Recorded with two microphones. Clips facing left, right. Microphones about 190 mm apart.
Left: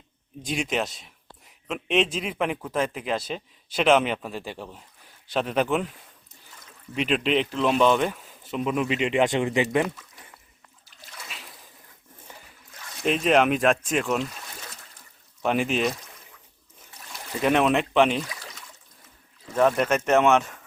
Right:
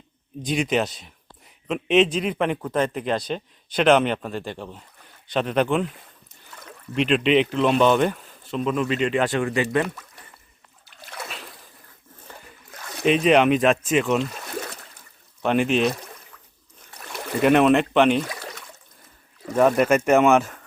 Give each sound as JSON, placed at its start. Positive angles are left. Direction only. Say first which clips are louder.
{"t": 0.4, "sound": "a man's voice", "louder": "right 5 dB", "side_deg": 0}
{"t": 6.5, "sound": "a sound", "louder": "right 9 dB", "side_deg": -70}
{"t": 6.9, "sound": "a man's voice", "louder": "right 5 dB", "side_deg": 5}
{"t": 10.8, "sound": "splash", "louder": "right 9 dB", "side_deg": -65}
{"t": 13.2, "sound": "a man's voice", "louder": "right 2 dB", "side_deg": 0}
{"t": 15.4, "sound": "a man's voice", "louder": "right 4 dB", "side_deg": 0}
{"t": 16.9, "sound": "a sound", "louder": "right 8 dB", "side_deg": -65}
{"t": 17.4, "sound": "a man's voice", "louder": "right 5 dB", "side_deg": 0}
{"t": 18.3, "sound": "a sound", "louder": "right 6 dB", "side_deg": -65}
{"t": 19.5, "sound": "speech", "louder": "right 4 dB", "side_deg": -5}